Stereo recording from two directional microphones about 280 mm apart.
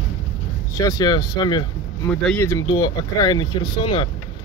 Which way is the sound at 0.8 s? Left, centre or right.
Centre.